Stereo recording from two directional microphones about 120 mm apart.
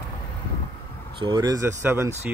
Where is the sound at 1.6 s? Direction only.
20° right (ahead or behind).